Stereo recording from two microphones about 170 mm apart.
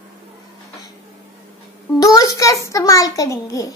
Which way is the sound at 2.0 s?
20° left (ahead or behind).